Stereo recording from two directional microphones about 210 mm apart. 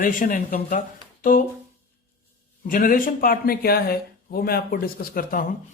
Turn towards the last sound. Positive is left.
turn(degrees=45)  # may be behind; listen again after turning